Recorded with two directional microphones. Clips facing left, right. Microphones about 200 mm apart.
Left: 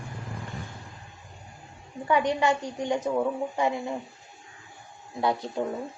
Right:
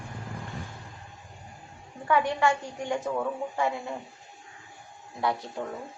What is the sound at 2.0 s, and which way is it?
A woman's voice, 20° left (ahead or behind).